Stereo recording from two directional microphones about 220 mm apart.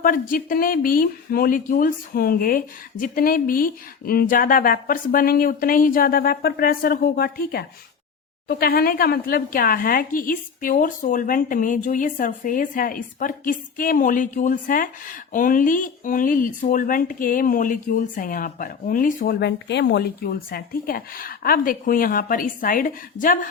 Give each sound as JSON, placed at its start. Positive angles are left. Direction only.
{"t": 0.0, "sound": "speech", "side_deg": 40}